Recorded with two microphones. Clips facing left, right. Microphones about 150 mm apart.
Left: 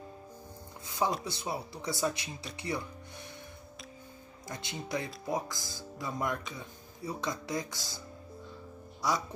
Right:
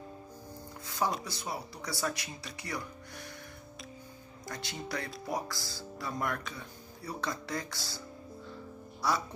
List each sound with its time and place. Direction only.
0.8 s music: 20° left (ahead or behind)
1.2 s speech: 25° left (ahead or behind)
4.5 s speech: 20° left (ahead or behind)